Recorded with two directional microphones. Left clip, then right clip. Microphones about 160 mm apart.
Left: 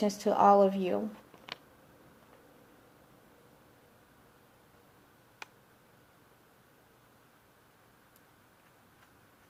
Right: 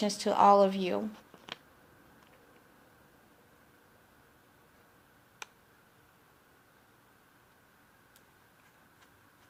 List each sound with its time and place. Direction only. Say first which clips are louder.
0.0 s a woman's voice: even; 25° right (ahead or behind)